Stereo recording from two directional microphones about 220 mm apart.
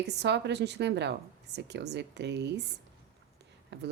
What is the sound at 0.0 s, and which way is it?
A woman's voice, 50° right (ahead or behind).